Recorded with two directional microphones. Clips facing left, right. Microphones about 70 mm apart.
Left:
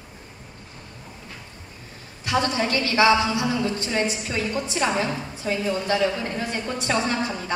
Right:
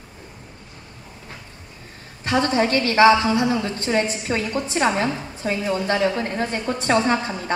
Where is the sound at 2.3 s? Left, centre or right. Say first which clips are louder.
Right 4 dB; right.